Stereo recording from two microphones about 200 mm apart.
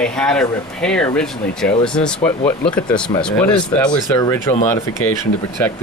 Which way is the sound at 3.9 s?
20° left (ahead or behind).